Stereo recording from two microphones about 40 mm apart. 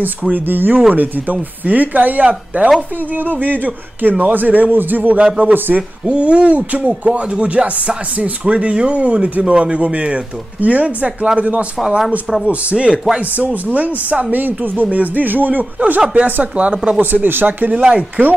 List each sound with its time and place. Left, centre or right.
0.3 s speech: right
2.2 s speech: right
3.3 s speech: right
5.8 s speech: right
13.4 s speech: right
17.0 s speech: right
17.8 s speech: right